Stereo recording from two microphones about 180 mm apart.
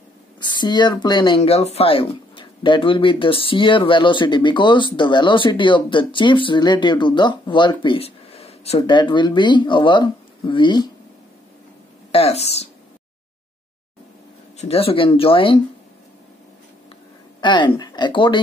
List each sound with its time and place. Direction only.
0.4 s speech: 25° left (ahead or behind)
12.1 s speech: 35° left (ahead or behind)
14.6 s speech: 35° left (ahead or behind)
17.4 s speech: 25° left (ahead or behind)